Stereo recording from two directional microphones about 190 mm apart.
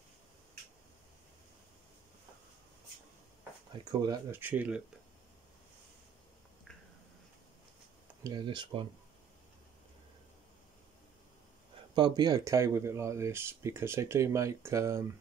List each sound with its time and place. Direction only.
3.9 s speech: 20° right (ahead or behind)
8.2 s speech: 20° right (ahead or behind)
11.9 s speech: 25° right (ahead or behind)